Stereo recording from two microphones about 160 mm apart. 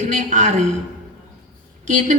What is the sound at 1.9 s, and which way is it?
Speech, 50° right (ahead or behind).